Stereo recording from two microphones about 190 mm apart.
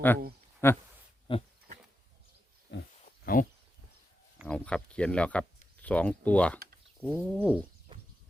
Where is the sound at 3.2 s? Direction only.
45° left (ahead or behind).